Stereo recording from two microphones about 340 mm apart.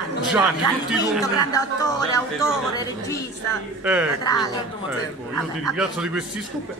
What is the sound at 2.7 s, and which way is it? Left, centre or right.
Speech, centre.